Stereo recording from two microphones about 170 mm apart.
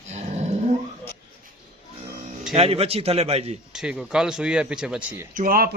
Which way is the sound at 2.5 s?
35° right (ahead or behind).